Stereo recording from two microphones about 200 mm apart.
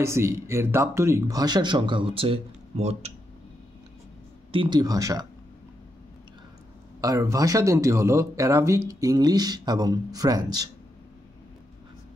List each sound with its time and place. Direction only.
0.0 s speech: 15° right (ahead or behind); by 3.1 s 35° right (ahead or behind)
4.5 s speech: 25° right (ahead or behind)
7.0 s speech: 15° right (ahead or behind)